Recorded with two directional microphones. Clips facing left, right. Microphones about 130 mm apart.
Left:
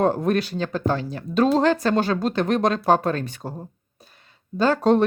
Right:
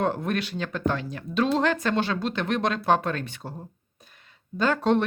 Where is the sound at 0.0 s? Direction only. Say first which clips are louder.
Left 6 dB; 40° left (ahead or behind).